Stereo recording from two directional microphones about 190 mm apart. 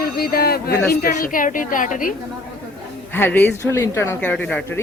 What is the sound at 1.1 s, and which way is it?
Speech, 45° left (ahead or behind).